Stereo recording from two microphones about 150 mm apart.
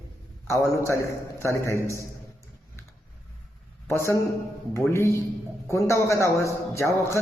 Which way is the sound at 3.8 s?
15° left (ahead or behind).